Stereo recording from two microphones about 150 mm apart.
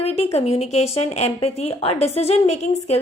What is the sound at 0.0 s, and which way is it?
A woman's voice, 45° left (ahead or behind).